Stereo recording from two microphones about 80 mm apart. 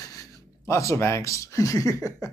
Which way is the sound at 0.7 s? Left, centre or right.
Left.